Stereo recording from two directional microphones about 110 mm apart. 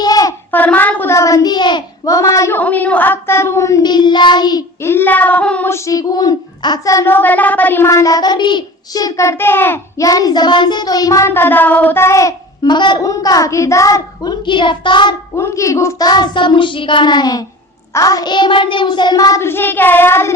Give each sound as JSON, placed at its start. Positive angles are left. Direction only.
{"t": 0.0, "sound": "a sound", "side_deg": 35}
{"t": 0.5, "sound": "child singing", "side_deg": 15}
{"t": 1.1, "sound": "child singing", "side_deg": 30}
{"t": 2.6, "sound": "a child's voice", "side_deg": 15}
{"t": 4.8, "sound": "child singing", "side_deg": 20}
{"t": 5.6, "sound": "child singing", "side_deg": 25}
{"t": 7.1, "sound": "child singing", "side_deg": 15}
{"t": 7.9, "sound": "a child's voice", "side_deg": 30}
{"t": 10.1, "sound": "child singing", "side_deg": 35}
{"t": 12.6, "sound": "a child's voice", "side_deg": 45}
{"t": 13.0, "sound": "child singing", "side_deg": 30}
{"t": 15.4, "sound": "a child's voice", "side_deg": 25}
{"t": 16.0, "sound": "a child's voice", "side_deg": 40}
{"t": 19.4, "sound": "a child's voice", "side_deg": 20}